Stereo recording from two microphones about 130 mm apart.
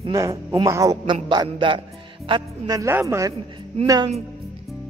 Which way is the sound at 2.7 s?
25° right (ahead or behind).